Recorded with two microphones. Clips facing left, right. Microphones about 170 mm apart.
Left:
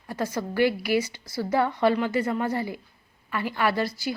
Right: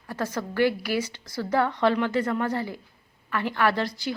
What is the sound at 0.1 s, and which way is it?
A woman's voice, 10° left (ahead or behind).